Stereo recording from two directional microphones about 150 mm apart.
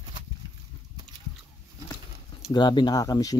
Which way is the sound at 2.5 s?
30° left (ahead or behind).